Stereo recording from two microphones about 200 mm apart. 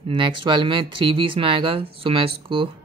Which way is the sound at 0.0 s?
25° right (ahead or behind).